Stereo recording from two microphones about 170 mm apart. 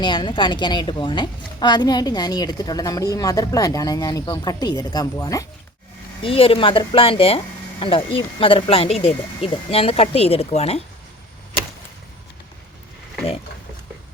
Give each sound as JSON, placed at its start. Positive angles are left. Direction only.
{"t": 0.0, "sound": "a woman's voice", "side_deg": 30}
{"t": 6.2, "sound": "speech", "side_deg": 30}